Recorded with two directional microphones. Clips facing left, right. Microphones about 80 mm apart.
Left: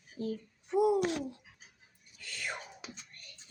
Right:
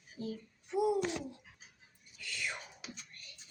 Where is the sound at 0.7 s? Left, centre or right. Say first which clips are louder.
Left 4 dB; left.